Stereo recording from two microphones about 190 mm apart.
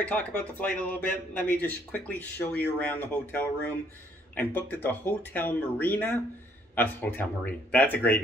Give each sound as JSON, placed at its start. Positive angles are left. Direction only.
{"t": 0.0, "sound": "a man's voice", "side_deg": 10}